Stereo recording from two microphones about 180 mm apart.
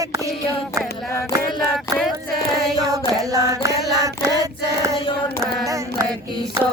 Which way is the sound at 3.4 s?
20° right (ahead or behind).